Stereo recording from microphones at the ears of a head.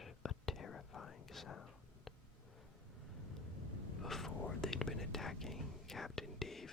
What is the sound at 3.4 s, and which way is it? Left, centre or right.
Whispering, left.